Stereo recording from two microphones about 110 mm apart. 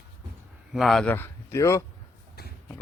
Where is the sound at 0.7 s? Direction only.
Centre (ahead or behind).